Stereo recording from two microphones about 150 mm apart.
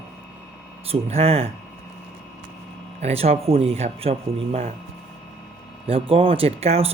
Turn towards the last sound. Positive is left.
turn(degrees=-45)  # may be behind; listen again after turning